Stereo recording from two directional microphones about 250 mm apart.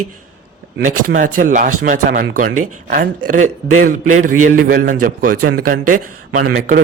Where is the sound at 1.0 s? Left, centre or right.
Right.